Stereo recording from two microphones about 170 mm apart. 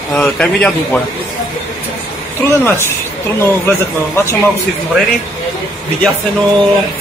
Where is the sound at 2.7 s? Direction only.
15° left (ahead or behind).